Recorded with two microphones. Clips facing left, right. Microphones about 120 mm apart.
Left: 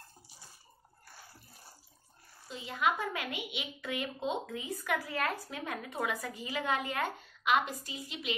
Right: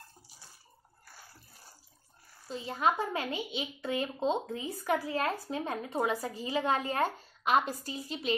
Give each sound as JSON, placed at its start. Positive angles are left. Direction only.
{"t": 2.4, "sound": "a child's voice", "side_deg": -35}